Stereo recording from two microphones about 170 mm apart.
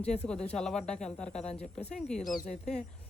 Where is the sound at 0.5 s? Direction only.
5° left (ahead or behind).